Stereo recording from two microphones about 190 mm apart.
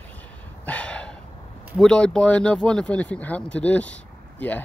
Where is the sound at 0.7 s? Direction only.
5° left (ahead or behind).